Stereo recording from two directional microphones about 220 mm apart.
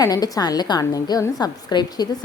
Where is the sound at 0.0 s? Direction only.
15° left (ahead or behind).